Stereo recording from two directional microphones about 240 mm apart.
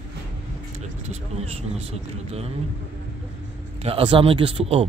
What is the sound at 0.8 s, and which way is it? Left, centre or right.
Speech, right.